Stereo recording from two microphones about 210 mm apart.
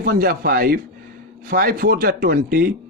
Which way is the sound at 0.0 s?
45° right (ahead or behind).